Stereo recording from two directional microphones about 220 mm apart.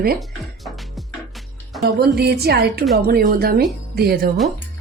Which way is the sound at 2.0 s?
45° right (ahead or behind).